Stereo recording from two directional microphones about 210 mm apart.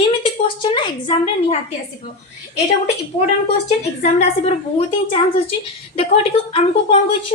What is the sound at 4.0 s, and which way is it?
A woman's voice, 30° left (ahead or behind).